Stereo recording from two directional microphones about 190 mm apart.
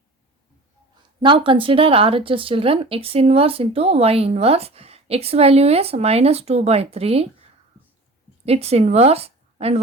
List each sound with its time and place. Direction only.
1.2 s speech: 25° right (ahead or behind)
8.4 s a woman's voice: 35° right (ahead or behind)